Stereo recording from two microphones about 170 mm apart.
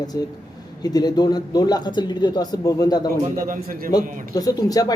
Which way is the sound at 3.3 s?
55° right (ahead or behind).